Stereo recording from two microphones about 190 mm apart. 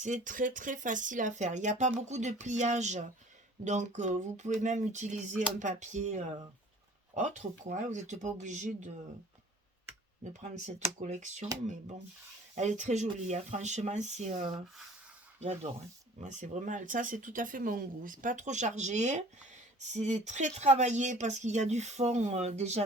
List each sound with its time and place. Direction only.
0.0 s speech: 40° right (ahead or behind)
10.4 s speech: 40° right (ahead or behind)
12.5 s speech: 40° right (ahead or behind)
16.2 s speech: 40° right (ahead or behind)